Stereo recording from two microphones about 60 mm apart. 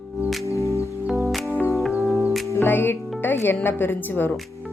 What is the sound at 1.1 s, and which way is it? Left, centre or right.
Music, centre.